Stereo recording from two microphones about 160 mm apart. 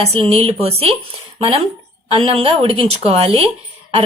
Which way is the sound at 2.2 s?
35° right (ahead or behind).